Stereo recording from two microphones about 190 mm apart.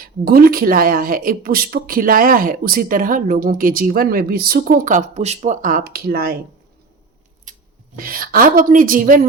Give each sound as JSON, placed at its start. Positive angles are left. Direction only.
{"t": 0.3, "sound": "a woman's voice", "side_deg": -50}
{"t": 7.5, "sound": "scissors", "side_deg": -40}
{"t": 7.9, "sound": "a woman's voice", "side_deg": -50}